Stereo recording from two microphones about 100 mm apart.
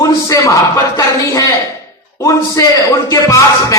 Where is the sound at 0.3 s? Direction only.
35° left (ahead or behind).